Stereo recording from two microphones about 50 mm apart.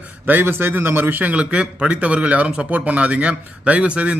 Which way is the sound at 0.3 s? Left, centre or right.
Right.